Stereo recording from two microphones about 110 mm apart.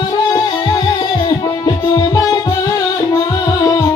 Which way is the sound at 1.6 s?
35° left (ahead or behind).